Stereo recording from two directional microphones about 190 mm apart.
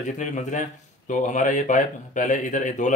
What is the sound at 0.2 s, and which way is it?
Speech, 40° left (ahead or behind).